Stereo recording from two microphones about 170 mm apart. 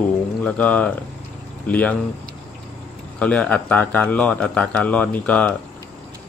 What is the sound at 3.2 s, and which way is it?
Speech, 5° left (ahead or behind).